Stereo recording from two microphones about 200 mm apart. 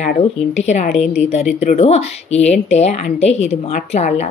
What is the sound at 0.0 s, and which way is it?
Speech, 35° left (ahead or behind).